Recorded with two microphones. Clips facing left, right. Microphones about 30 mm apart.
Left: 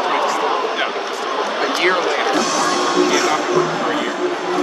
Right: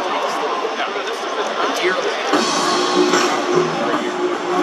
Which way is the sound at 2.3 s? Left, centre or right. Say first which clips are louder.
Even; right.